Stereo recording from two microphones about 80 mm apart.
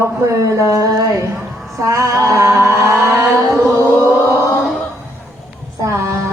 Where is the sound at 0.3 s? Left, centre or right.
Right.